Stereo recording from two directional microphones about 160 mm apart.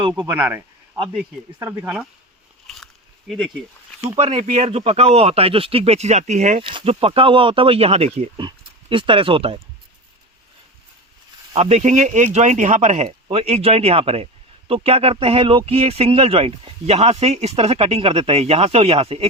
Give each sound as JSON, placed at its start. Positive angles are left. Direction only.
{"t": 0.1, "sound": "speech", "side_deg": -10}
{"t": 1.5, "sound": "speech", "side_deg": -15}
{"t": 2.6, "sound": "a sound", "side_deg": 0}
{"t": 4.2, "sound": "speech", "side_deg": -40}
{"t": 6.6, "sound": "speech", "side_deg": -35}
{"t": 11.5, "sound": "speech", "side_deg": -40}
{"t": 13.1, "sound": "speech", "side_deg": -35}